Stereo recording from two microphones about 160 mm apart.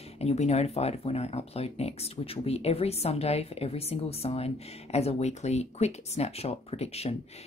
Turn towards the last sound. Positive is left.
turn(degrees=40)  # may be behind; listen again after turning